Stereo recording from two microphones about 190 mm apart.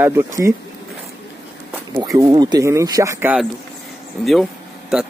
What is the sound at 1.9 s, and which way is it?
Speech, 15° right (ahead or behind).